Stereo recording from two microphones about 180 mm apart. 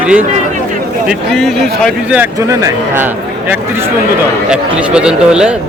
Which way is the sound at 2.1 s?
15° right (ahead or behind).